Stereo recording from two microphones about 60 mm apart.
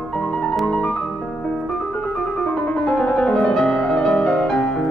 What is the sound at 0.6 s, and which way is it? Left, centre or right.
Music, left.